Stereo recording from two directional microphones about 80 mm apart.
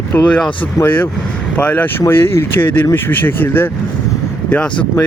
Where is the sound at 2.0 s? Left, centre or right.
Left.